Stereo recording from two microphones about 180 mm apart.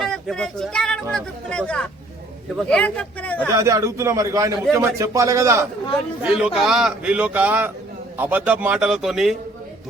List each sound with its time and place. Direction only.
0.0 s speech: centre (ahead or behind)
3.3 s a man's voice: 10° right (ahead or behind)
6.3 s speech: centre (ahead or behind)